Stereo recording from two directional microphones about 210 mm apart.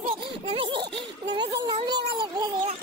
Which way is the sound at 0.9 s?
20° right (ahead or behind).